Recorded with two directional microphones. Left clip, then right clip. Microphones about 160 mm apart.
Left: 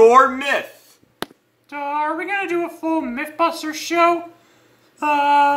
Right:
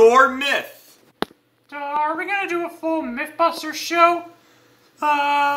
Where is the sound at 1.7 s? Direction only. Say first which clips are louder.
Even; 15° left (ahead or behind).